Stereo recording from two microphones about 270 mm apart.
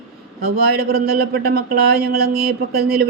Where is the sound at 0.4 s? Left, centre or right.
Right.